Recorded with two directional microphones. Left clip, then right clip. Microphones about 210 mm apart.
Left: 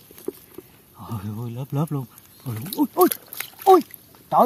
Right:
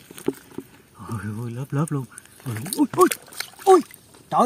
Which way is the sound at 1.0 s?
30° right (ahead or behind).